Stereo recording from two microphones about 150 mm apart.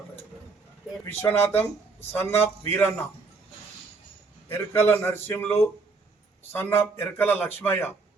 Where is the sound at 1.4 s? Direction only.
15° left (ahead or behind).